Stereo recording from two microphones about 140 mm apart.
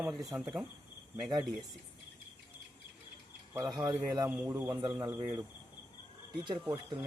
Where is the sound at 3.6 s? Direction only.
30° right (ahead or behind).